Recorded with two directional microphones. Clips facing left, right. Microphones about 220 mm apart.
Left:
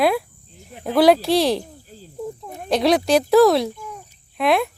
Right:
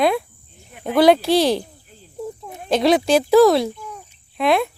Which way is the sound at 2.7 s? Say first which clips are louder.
Right 1 dB; centre (ahead or behind).